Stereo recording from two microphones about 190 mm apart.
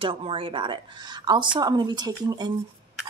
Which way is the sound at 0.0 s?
25° right (ahead or behind).